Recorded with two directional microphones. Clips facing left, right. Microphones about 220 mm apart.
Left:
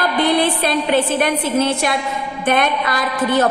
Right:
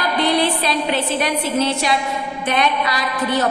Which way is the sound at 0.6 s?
50° left (ahead or behind).